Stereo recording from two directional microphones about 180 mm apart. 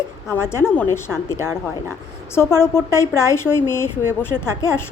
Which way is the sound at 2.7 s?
15° left (ahead or behind).